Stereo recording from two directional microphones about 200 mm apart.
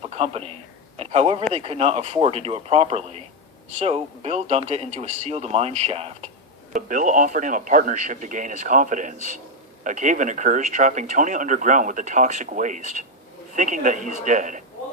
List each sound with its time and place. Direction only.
0.2 s speech: 30° right (ahead or behind)